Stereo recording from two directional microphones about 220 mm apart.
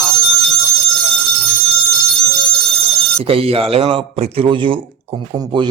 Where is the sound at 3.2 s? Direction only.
25° right (ahead or behind).